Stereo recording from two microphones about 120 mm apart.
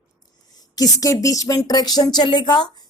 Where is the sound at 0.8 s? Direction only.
30° left (ahead or behind).